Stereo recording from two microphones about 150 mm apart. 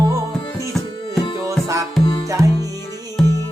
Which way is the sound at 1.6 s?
20° right (ahead or behind).